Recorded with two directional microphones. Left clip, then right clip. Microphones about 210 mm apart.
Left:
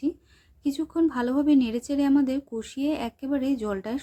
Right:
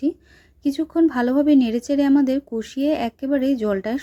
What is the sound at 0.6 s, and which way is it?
A woman's voice, 20° right (ahead or behind).